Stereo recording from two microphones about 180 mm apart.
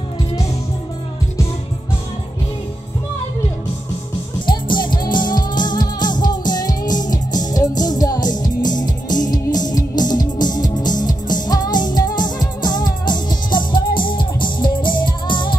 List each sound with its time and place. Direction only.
4.5 s music: 25° left (ahead or behind)